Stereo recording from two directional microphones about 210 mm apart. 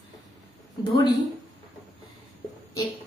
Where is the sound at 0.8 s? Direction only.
20° left (ahead or behind).